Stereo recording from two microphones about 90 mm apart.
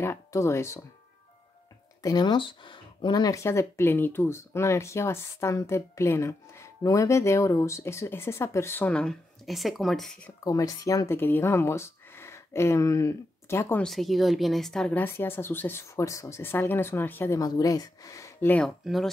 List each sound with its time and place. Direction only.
0.3 s speech: 30° left (ahead or behind)
2.0 s speech: 55° left (ahead or behind)
3.3 s speech: 30° left (ahead or behind)
8.9 s speech: 10° left (ahead or behind)
10.4 s speech: 40° left (ahead or behind)
11.1 s speech: 25° left (ahead or behind)
13.8 s speech: centre (ahead or behind)
15.0 s speech: 25° left (ahead or behind)
15.8 s speech: 35° left (ahead or behind)
17.4 s speech: 45° left (ahead or behind)